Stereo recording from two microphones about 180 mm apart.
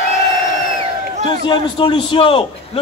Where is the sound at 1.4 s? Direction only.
25° left (ahead or behind).